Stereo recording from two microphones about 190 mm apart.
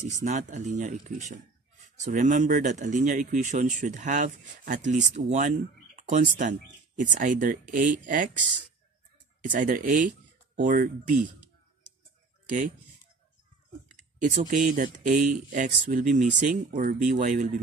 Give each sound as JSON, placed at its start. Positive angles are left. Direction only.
{"t": 0.2, "sound": "speech", "side_deg": -40}
{"t": 9.5, "sound": "speech", "side_deg": -45}
{"t": 12.4, "sound": "speech", "side_deg": -45}
{"t": 13.9, "sound": "a sound", "side_deg": -40}
{"t": 14.5, "sound": "speech", "side_deg": -45}